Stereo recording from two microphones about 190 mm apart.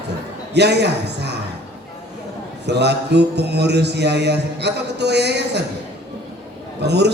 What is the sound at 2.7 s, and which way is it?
Music, 60° right (ahead or behind).